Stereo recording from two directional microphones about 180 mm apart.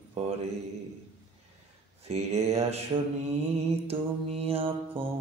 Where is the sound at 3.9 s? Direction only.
35° right (ahead or behind).